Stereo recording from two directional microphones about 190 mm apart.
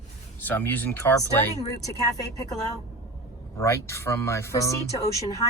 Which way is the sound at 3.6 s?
15° left (ahead or behind).